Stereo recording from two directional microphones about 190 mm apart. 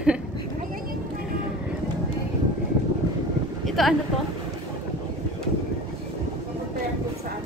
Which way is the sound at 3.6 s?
Centre (ahead or behind).